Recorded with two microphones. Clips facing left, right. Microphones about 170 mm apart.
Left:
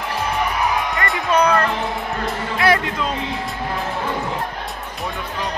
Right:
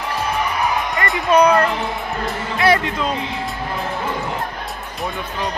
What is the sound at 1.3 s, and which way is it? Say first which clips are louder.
Speech: right 4 dB; 15° right (ahead or behind).